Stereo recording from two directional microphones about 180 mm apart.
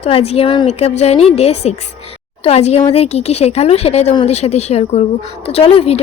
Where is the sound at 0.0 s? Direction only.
35° left (ahead or behind).